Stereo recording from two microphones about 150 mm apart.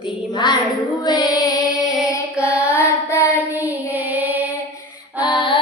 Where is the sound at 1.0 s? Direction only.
25° left (ahead or behind).